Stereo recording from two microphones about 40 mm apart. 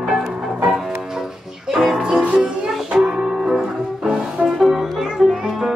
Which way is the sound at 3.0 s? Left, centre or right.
Centre.